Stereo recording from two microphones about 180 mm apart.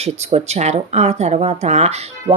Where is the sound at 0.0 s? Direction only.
35° right (ahead or behind).